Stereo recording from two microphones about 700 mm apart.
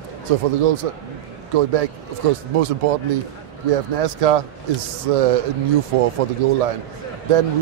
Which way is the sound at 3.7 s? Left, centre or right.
Right.